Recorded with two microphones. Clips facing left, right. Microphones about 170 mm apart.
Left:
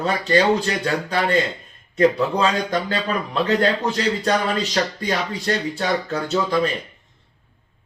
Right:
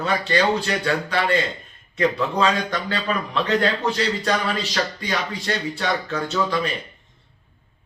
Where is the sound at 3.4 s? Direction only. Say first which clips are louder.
Left 2 dB; 40° left (ahead or behind).